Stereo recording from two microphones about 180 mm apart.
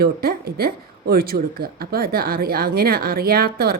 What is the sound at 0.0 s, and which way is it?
Speech, 55° right (ahead or behind).